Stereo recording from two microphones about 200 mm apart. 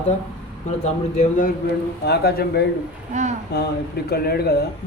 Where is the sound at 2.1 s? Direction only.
55° left (ahead or behind).